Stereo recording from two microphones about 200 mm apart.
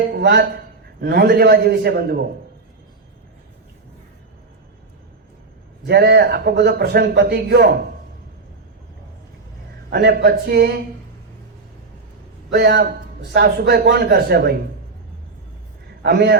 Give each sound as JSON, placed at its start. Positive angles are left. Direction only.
{"t": 0.1, "sound": "a sound", "side_deg": -55}
{"t": 1.0, "sound": "a man's voice", "side_deg": -55}
{"t": 5.8, "sound": "a man's voice", "side_deg": -55}
{"t": 9.9, "sound": "a man's voice", "side_deg": -50}
{"t": 12.5, "sound": "a man's voice", "side_deg": -50}
{"t": 16.0, "sound": "a man's voice", "side_deg": -55}